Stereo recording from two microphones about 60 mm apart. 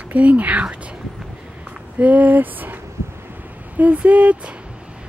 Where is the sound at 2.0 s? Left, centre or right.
Right.